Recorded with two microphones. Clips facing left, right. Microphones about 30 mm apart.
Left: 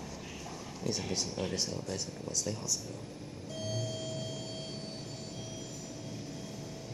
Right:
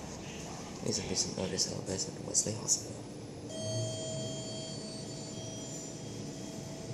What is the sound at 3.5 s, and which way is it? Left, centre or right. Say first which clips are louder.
Vehicle: even; centre.